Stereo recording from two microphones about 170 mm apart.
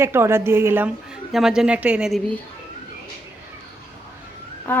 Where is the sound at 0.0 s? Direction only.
15° right (ahead or behind).